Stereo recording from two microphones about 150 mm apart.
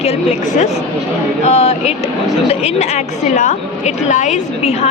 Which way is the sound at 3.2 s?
55° left (ahead or behind).